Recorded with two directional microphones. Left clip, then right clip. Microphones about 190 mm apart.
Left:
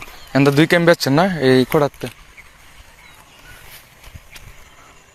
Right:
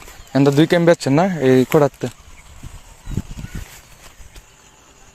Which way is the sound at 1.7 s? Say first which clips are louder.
Right 2 dB; 30° right (ahead or behind).